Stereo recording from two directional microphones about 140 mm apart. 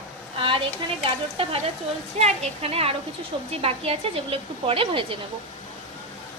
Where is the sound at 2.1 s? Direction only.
50° right (ahead or behind).